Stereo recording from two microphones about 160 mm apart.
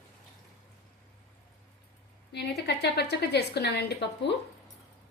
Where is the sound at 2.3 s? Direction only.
90° left.